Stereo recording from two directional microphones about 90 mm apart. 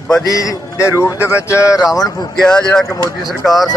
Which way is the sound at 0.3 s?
40° left (ahead or behind).